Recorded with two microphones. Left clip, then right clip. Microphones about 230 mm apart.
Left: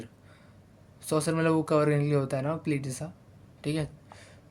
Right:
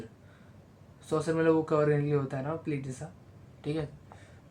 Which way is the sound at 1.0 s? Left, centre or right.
Left.